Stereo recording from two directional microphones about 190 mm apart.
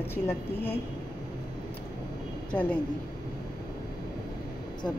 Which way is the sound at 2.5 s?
5° left (ahead or behind).